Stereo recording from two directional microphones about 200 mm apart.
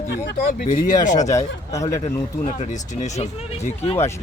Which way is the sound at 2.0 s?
30° left (ahead or behind).